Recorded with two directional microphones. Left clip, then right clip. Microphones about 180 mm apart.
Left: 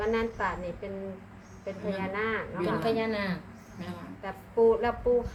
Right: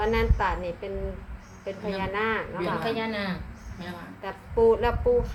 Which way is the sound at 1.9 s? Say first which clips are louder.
Right 5 dB; 55° right (ahead or behind).